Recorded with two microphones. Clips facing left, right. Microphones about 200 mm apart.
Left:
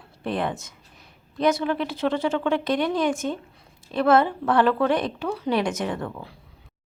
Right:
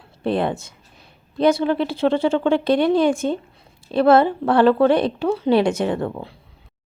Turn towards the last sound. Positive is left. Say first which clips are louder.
# right 6 dB
turn(degrees=-30)  # may be behind; listen again after turning